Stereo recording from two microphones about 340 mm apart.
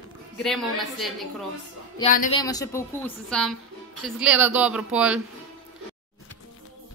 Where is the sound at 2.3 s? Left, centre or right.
Centre.